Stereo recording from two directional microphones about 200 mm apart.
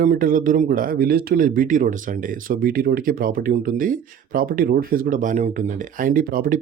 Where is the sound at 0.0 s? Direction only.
45° right (ahead or behind).